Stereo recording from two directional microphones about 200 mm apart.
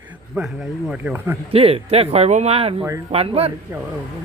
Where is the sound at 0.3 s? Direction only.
5° right (ahead or behind).